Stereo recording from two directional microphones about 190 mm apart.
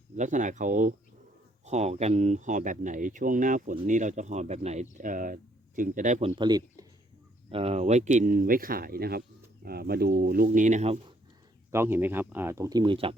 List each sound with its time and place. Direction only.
0.2 s speech: 40° right (ahead or behind)
11.7 s speech: 10° right (ahead or behind); by 13.1 s 30° right (ahead or behind)